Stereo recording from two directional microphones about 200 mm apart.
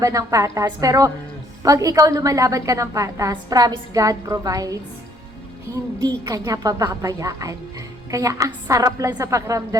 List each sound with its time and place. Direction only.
0.0 s a woman's voice: 15° right (ahead or behind)